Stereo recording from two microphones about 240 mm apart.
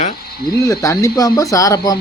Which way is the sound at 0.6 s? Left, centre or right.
Centre.